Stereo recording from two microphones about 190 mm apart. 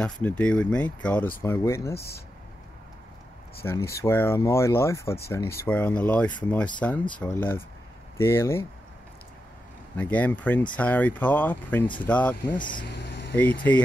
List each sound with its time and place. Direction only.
0.0 s speech: 5° left (ahead or behind)
3.6 s speech: 15° left (ahead or behind)
9.9 s speech: 10° left (ahead or behind)
12.5 s speech: 25° left (ahead or behind)
12.8 s vehicle: 65° left (ahead or behind)
13.4 s speech: 10° left (ahead or behind)